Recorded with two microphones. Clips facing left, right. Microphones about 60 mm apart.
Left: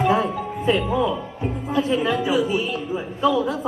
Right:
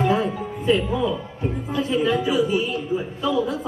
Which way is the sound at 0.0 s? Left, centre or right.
Left.